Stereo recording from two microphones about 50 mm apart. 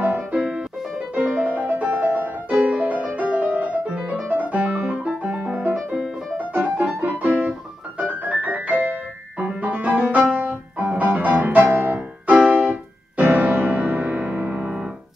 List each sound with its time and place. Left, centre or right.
0.0 s music: right
1.1 s music: right
4.3 s piano: right
6.3 s music: right
8.0 s piano: right
9.5 s music: right
12.4 s keyboard: right
13.1 s music: right